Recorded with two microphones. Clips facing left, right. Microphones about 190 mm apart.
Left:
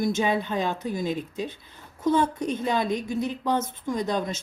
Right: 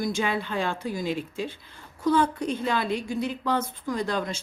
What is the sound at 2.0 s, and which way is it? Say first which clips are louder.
Speech: even; 20° left (ahead or behind).